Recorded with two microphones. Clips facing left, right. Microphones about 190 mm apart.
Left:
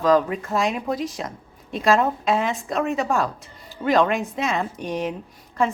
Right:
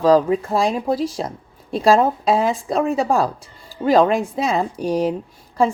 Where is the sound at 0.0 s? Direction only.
35° right (ahead or behind).